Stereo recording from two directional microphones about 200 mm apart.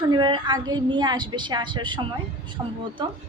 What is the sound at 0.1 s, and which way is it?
A woman's voice, 20° right (ahead or behind).